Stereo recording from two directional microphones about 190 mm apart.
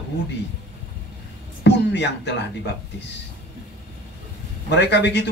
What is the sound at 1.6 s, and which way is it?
A man's voice, 65° left (ahead or behind).